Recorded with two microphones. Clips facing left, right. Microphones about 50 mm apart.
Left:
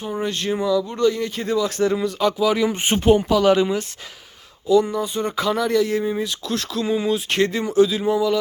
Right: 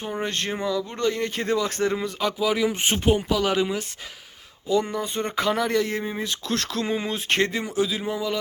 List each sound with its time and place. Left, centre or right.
0.3 s speech: right
1.8 s speech: right; by 3.8 s centre
4.7 s speech: right
6.2 s speech: right
6.9 s speech: right
7.5 s speech: centre